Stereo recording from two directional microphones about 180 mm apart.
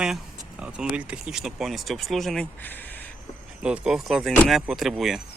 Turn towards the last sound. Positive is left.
turn(degrees=0)  # may be behind; listen again after turning